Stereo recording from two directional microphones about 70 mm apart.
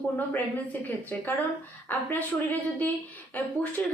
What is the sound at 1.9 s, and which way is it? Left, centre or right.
A woman's voice, left.